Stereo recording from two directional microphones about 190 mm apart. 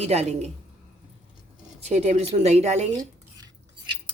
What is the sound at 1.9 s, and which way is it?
A woman's voice, 35° right (ahead or behind).